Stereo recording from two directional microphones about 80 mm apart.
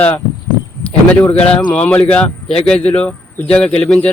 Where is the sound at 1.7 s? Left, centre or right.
Centre.